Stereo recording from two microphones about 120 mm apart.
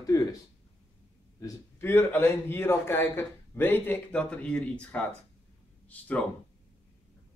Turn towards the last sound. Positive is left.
turn(degrees=10)  # may be behind; listen again after turning